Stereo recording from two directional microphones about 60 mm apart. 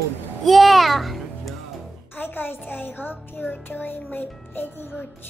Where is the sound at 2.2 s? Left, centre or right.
Left.